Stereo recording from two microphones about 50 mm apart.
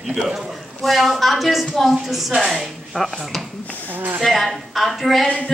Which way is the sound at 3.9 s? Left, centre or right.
Right.